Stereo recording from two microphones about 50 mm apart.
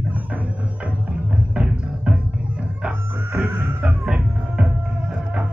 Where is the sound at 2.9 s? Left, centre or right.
Right.